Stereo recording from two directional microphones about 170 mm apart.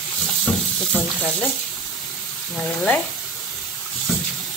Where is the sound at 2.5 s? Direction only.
5° left (ahead or behind).